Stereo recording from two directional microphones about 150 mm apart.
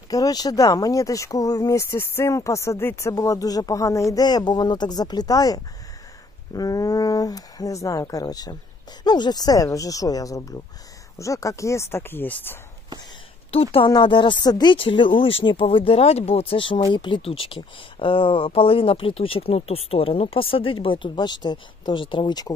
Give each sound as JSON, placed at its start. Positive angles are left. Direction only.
{"t": 0.1, "sound": "speech", "side_deg": 25}
{"t": 13.5, "sound": "speech", "side_deg": 40}